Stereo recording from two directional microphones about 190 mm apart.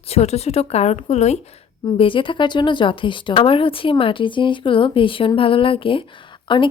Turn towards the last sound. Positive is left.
turn(degrees=25)  # may be behind; listen again after turning